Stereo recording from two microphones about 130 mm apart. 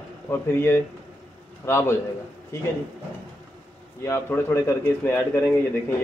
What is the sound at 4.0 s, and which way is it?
A man's voice, 20° left (ahead or behind).